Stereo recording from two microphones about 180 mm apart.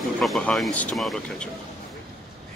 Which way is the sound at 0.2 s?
5° left (ahead or behind).